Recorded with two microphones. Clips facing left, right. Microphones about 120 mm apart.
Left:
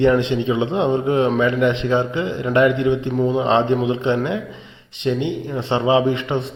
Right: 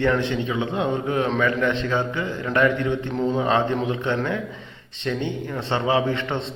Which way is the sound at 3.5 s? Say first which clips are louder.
Left 4 dB; 25° left (ahead or behind).